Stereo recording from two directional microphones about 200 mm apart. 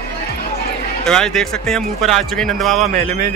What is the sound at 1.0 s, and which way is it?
Speech, 5° left (ahead or behind).